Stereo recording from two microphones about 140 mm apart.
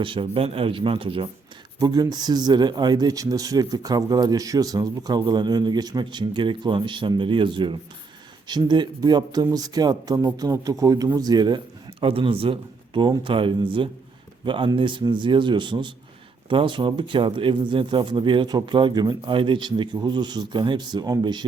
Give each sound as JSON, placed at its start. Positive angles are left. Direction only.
{"t": 0.0, "sound": "speech", "side_deg": -40}
{"t": 1.8, "sound": "speech", "side_deg": -30}